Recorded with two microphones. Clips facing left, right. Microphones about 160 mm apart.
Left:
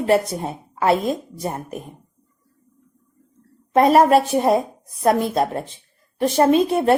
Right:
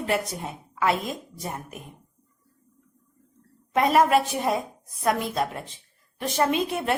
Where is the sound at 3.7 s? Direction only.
40° left (ahead or behind).